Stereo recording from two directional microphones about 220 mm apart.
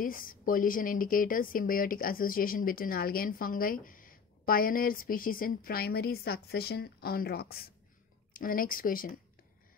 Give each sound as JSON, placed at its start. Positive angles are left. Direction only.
{"t": 0.0, "sound": "speech", "side_deg": 40}